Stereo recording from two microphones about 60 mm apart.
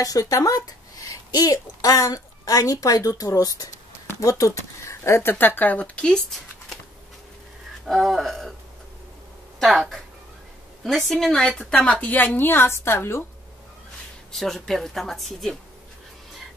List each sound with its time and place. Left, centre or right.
0.0 s a woman's voice: left
4.2 s speech: left
5.2 s speech: left; by 6.2 s centre
7.8 s speech: centre
9.6 s speech: centre
12.1 s a woman's voice: left
14.3 s speech: centre